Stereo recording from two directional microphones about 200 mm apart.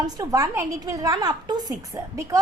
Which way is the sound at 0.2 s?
15° right (ahead or behind).